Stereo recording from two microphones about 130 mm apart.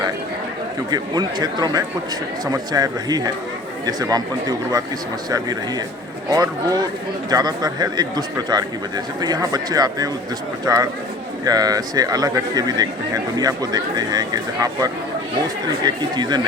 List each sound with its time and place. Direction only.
0.9 s a man's voice: 30° right (ahead or behind)
6.3 s a man's voice: 30° right (ahead or behind)